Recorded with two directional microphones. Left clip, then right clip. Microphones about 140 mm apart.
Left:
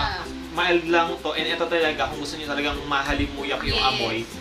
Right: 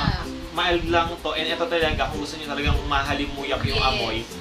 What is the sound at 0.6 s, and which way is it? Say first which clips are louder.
A man's voice: left 1 dB; 5° right (ahead or behind).